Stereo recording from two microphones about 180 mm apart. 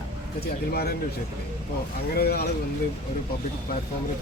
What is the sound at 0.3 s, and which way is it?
Speech, 60° left (ahead or behind).